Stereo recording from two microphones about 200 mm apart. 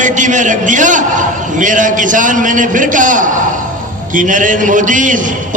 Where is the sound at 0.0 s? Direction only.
40° right (ahead or behind).